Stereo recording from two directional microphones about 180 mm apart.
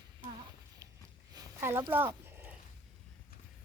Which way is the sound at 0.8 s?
20° right (ahead or behind).